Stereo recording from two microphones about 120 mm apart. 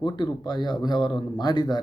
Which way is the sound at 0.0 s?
35° left (ahead or behind).